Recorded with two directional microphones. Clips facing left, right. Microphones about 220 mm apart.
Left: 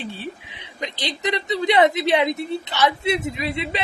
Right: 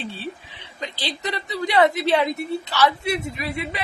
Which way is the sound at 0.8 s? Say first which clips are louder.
Left 2 dB; 20° left (ahead or behind).